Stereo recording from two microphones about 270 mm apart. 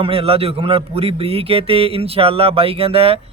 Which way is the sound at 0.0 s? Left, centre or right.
Right.